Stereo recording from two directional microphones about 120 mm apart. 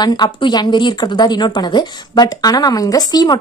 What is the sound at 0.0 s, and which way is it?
Speech, 35° left (ahead or behind).